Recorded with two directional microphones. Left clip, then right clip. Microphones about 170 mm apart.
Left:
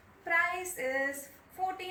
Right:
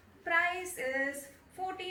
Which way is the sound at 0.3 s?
10° right (ahead or behind).